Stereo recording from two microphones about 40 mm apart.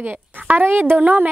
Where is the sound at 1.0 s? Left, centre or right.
Right.